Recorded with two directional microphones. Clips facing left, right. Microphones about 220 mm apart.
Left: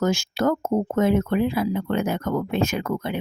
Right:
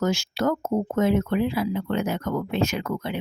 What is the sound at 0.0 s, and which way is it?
Speech, 50° left (ahead or behind).